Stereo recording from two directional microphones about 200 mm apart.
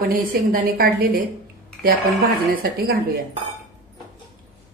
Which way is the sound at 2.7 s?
50° right (ahead or behind).